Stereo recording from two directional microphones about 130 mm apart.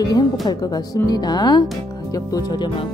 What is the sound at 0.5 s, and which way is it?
Speech, 30° left (ahead or behind).